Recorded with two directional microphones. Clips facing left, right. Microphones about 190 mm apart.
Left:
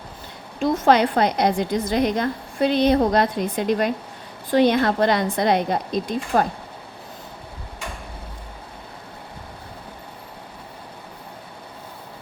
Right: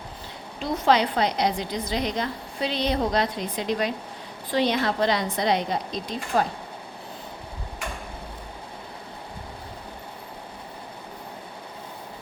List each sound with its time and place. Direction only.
0.6 s a woman's voice: 50° left (ahead or behind)